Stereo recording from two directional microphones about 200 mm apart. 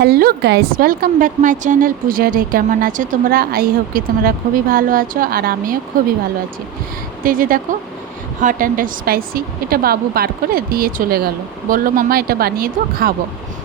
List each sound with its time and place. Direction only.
0.0 s a woman's voice: 50° right (ahead or behind)
7.3 s a woman's voice: 45° right (ahead or behind)